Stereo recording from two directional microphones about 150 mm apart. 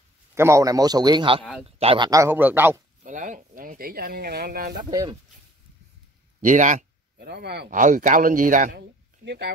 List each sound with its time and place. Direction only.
0.3 s a man's voice: 20° right (ahead or behind); by 2.0 s 40° right (ahead or behind)
2.0 s a man's voice: 20° right (ahead or behind)
3.0 s speech: 60° right (ahead or behind); by 4.7 s 80° right
6.4 s speech: 55° right (ahead or behind)